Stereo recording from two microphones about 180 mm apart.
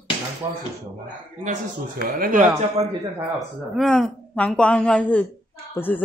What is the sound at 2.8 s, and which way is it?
Speech, 35° right (ahead or behind).